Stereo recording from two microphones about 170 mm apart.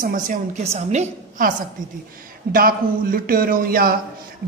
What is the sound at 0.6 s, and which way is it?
Speech, 40° right (ahead or behind).